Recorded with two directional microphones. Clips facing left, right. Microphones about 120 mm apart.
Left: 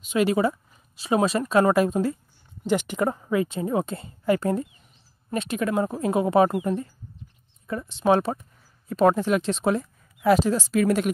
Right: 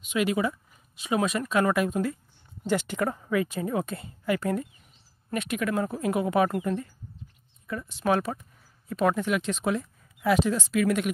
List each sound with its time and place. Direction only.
0.0 s speech: 35° left (ahead or behind)
2.6 s speech: 15° left (ahead or behind); by 11.1 s 35° left (ahead or behind)